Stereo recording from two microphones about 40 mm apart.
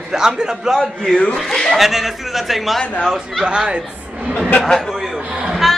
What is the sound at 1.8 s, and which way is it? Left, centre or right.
Speech, centre.